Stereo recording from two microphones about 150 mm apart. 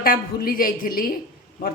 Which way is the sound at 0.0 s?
75° left (ahead or behind).